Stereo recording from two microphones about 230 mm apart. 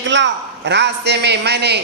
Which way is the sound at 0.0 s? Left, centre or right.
Right.